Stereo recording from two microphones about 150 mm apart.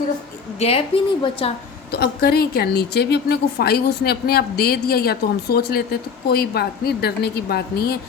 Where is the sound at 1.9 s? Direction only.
90° left.